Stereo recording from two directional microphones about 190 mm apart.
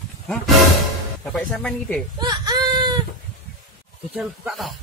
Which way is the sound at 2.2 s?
20° right (ahead or behind).